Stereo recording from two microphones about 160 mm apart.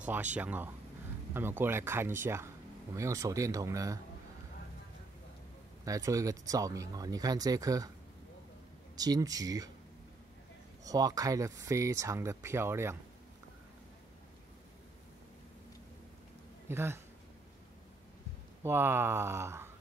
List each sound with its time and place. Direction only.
0.0 s speech: 10° right (ahead or behind)
5.9 s speech: 20° right (ahead or behind)
8.9 s speech: 25° right (ahead or behind)
10.8 s speech: 25° right (ahead or behind)
16.6 s speech: 15° right (ahead or behind)
18.6 s speech: 15° right (ahead or behind)